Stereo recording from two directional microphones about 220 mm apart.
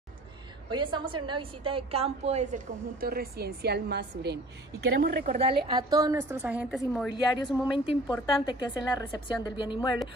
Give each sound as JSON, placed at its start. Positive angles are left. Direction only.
{"t": 0.7, "sound": "a woman's voice", "side_deg": -20}
{"t": 5.2, "sound": "a woman's voice", "side_deg": -25}
{"t": 7.4, "sound": "a woman's voice", "side_deg": 25}